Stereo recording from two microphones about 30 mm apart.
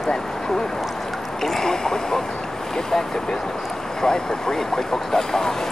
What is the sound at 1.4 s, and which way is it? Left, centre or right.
Speech, centre.